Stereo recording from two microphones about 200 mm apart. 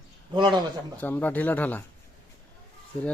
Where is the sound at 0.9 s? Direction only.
10° left (ahead or behind).